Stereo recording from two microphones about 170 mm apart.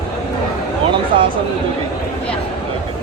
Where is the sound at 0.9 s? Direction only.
30° right (ahead or behind).